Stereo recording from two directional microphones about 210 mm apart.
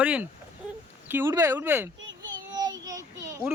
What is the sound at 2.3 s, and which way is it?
Child singing, 20° right (ahead or behind).